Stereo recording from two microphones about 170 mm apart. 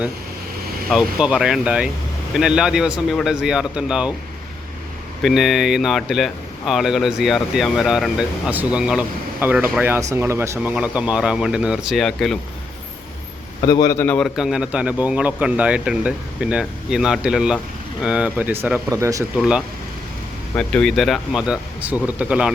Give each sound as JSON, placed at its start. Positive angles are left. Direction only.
{"t": 0.9, "sound": "speech", "side_deg": -5}
{"t": 5.2, "sound": "speech", "side_deg": 0}
{"t": 13.7, "sound": "a man's voice", "side_deg": 20}
{"t": 14.0, "sound": "speech", "side_deg": 5}
{"t": 19.4, "sound": "speech", "side_deg": -5}